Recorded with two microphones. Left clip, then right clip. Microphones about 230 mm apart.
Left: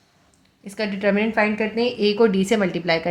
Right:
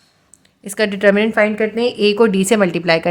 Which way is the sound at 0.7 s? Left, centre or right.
Right.